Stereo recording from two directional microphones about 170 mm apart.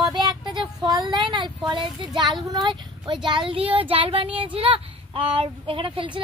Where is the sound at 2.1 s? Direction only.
25° right (ahead or behind).